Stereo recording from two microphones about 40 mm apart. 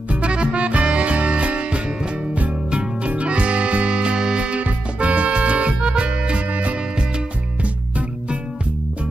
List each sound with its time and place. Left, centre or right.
0.1 s music: right